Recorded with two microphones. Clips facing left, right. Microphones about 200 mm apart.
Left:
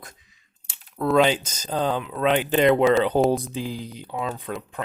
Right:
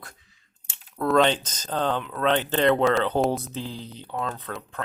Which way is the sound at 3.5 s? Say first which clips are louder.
Left 4 dB; 10° left (ahead or behind).